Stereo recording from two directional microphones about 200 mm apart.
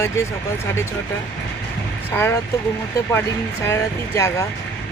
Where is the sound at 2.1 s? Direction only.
10° left (ahead or behind).